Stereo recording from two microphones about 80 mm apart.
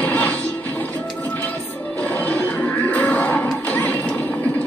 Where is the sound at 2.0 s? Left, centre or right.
Centre.